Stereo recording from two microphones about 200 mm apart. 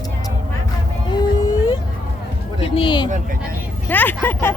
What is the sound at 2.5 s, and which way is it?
Speech, 25° left (ahead or behind).